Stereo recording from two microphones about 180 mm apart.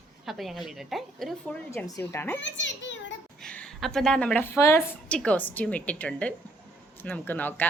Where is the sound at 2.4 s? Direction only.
90° left.